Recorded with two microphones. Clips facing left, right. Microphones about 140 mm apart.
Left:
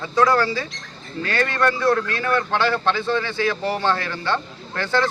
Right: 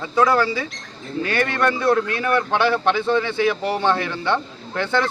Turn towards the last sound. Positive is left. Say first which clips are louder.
# right 1 dB
turn(degrees=-20)  # may be behind; listen again after turning